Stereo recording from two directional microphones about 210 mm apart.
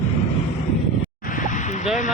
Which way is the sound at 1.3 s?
35° left (ahead or behind).